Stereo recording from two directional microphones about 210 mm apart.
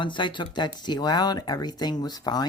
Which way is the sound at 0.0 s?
25° left (ahead or behind).